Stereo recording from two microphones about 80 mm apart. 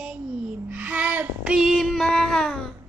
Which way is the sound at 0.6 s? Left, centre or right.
Right.